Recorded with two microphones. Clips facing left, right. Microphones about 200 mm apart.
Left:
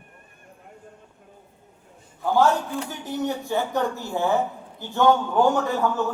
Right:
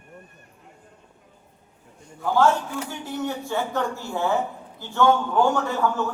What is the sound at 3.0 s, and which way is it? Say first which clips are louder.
Speech: left 2 dB; 20° left (ahead or behind).